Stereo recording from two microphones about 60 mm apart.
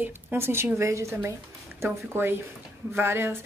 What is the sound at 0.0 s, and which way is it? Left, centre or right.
Speech, right.